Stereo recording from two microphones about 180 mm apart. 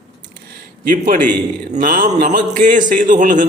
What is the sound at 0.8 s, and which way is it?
A man's voice, 45° right (ahead or behind).